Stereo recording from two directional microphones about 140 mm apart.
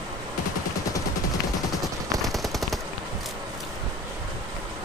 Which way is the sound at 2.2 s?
Centre (ahead or behind).